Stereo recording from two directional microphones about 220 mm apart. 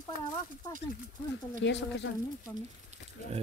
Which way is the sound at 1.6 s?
55° left (ahead or behind).